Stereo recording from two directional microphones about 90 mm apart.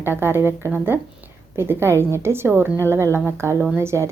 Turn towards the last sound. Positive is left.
turn(degrees=-30)  # may be behind; listen again after turning